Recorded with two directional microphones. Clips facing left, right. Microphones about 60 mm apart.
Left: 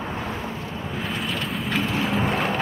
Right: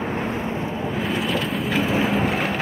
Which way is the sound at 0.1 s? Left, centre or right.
Right.